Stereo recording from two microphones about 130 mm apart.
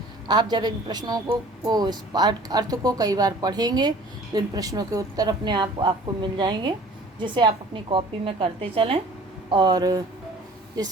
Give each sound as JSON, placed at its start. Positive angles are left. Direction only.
{"t": 0.3, "sound": "a woman's voice", "side_deg": -30}